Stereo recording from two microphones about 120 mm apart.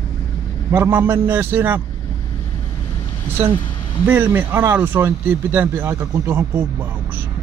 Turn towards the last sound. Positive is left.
turn(degrees=-15)  # may be behind; listen again after turning